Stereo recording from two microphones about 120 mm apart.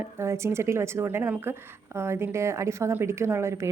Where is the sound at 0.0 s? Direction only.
20° right (ahead or behind).